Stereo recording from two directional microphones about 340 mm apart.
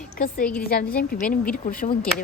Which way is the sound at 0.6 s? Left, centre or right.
Left.